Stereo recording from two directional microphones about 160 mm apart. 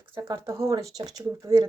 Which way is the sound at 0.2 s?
20° right (ahead or behind).